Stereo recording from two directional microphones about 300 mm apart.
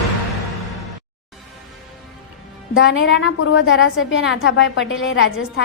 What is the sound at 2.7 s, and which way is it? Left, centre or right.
A woman's voice, left.